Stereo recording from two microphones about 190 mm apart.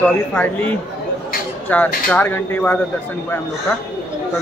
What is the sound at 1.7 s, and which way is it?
A man's voice, 10° left (ahead or behind).